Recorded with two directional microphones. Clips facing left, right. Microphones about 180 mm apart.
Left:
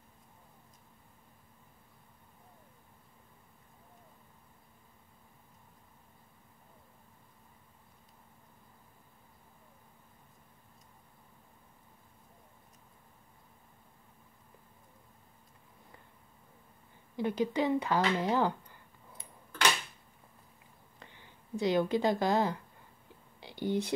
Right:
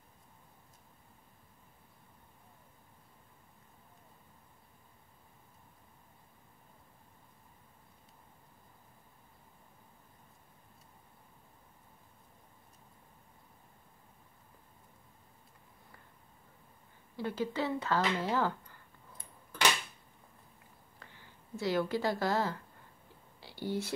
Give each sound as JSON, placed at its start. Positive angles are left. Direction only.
{"t": 17.2, "sound": "speech", "side_deg": 15}
{"t": 21.0, "sound": "speech", "side_deg": 20}
{"t": 23.4, "sound": "a sound", "side_deg": 20}